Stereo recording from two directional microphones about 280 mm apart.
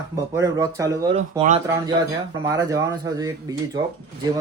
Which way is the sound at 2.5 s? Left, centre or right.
Centre.